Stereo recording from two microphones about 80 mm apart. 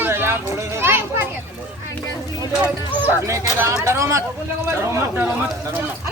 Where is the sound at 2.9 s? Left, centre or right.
Right.